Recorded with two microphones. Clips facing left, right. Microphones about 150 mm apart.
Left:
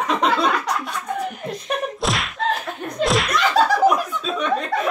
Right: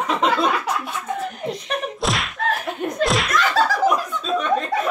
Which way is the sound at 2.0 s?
Centre (ahead or behind).